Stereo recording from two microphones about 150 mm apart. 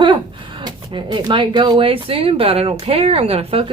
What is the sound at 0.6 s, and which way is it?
Speech, 30° right (ahead or behind).